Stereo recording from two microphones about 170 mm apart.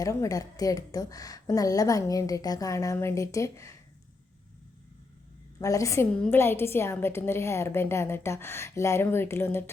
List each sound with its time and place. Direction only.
0.0 s a woman's voice: 20° left (ahead or behind)
5.5 s a woman's voice: 20° left (ahead or behind)